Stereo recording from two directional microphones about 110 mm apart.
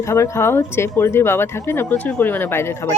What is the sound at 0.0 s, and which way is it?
Speech, 25° left (ahead or behind).